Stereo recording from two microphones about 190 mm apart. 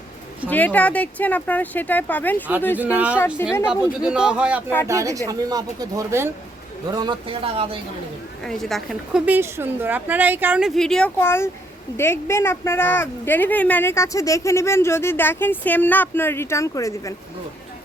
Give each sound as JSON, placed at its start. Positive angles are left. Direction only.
{"t": 0.5, "sound": "speech", "side_deg": 10}
{"t": 2.7, "sound": "a woman's voice", "side_deg": -10}
{"t": 3.4, "sound": "speech", "side_deg": 15}
{"t": 4.0, "sound": "speech", "side_deg": -5}
{"t": 4.9, "sound": "a woman's voice", "side_deg": -15}
{"t": 8.4, "sound": "a woman's voice", "side_deg": 0}
{"t": 10.8, "sound": "speech", "side_deg": 5}